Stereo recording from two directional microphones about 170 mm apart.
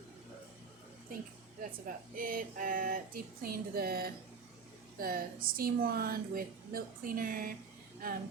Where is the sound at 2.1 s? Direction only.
55° right (ahead or behind).